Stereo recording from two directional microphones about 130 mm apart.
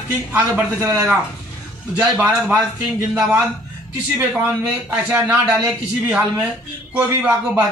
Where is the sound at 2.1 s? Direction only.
10° right (ahead or behind).